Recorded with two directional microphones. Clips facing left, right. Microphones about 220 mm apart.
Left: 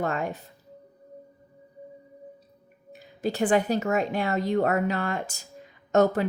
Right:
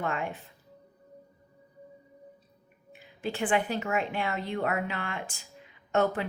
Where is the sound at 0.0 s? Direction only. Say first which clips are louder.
Left 4 dB; 40° left (ahead or behind).